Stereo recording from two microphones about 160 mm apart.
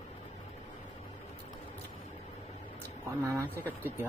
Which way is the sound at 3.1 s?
15° right (ahead or behind).